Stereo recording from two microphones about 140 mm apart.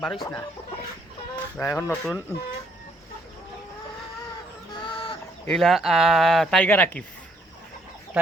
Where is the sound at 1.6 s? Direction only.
15° left (ahead or behind).